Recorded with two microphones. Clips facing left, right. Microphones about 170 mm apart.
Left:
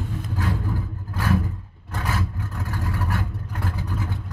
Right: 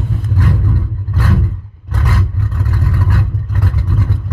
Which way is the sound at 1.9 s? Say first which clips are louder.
Right 7 dB; 90° right.